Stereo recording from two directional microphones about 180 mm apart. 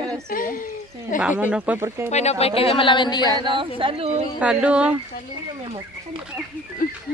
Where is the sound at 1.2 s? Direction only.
10° right (ahead or behind).